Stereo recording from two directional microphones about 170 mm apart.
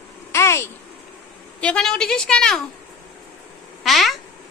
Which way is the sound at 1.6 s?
5° left (ahead or behind).